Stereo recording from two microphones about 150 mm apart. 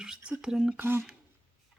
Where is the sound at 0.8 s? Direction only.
15° right (ahead or behind).